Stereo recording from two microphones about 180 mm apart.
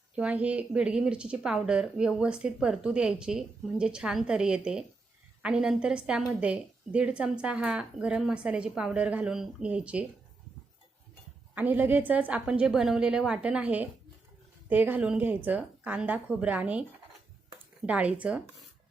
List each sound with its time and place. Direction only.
0.2 s speech: 5° right (ahead or behind)
11.5 s a woman's voice: 10° right (ahead or behind)
17.8 s a woman's voice: 5° right (ahead or behind)